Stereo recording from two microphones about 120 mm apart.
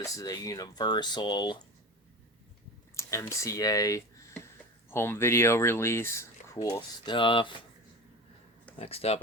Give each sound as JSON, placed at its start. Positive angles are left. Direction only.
{"t": 0.0, "sound": "speech", "side_deg": 30}
{"t": 2.9, "sound": "speech", "side_deg": 25}
{"t": 6.6, "sound": "speech", "side_deg": 35}
{"t": 8.8, "sound": "speech", "side_deg": 55}